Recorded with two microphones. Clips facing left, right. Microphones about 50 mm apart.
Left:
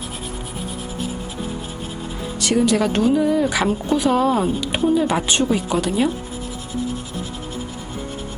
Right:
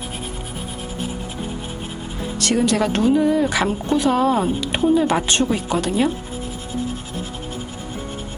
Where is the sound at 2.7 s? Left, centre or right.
Centre.